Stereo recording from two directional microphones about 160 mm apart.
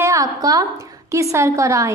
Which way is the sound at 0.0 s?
20° right (ahead or behind).